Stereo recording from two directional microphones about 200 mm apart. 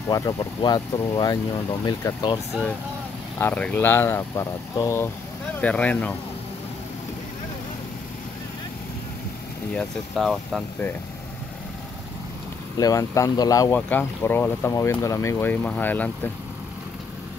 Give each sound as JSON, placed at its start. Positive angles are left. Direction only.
{"t": 0.1, "sound": "speech", "side_deg": 15}
{"t": 3.3, "sound": "speech", "side_deg": 10}
{"t": 9.8, "sound": "speech", "side_deg": 0}
{"t": 12.7, "sound": "speech", "side_deg": 15}